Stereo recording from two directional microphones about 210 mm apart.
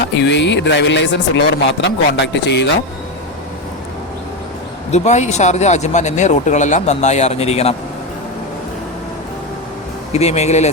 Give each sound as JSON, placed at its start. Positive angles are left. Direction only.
{"t": 0.0, "sound": "speech", "side_deg": 55}
{"t": 4.9, "sound": "speech", "side_deg": 35}
{"t": 10.1, "sound": "speech", "side_deg": 30}